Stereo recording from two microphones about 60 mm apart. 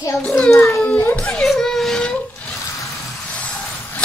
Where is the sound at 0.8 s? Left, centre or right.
Left.